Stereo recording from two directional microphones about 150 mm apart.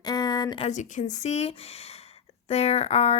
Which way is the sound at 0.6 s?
55° left (ahead or behind).